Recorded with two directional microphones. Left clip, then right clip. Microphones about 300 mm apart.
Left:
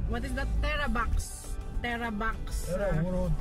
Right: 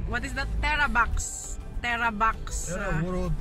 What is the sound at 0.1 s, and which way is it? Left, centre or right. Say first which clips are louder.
Speech: right 5 dB; centre.